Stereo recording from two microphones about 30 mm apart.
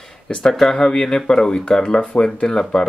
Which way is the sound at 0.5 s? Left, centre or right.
Centre.